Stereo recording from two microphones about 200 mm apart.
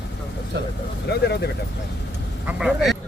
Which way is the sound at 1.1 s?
55° left (ahead or behind).